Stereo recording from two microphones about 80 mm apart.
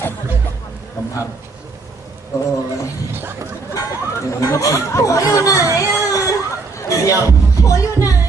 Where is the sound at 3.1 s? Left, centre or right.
Right.